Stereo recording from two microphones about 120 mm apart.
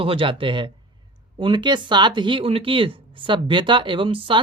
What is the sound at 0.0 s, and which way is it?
Speech, 50° right (ahead or behind).